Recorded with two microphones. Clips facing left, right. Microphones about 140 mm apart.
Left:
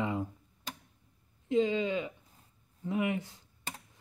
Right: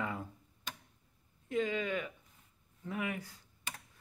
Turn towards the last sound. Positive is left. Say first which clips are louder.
# left 3 dB
turn(degrees=25)  # may be behind; listen again after turning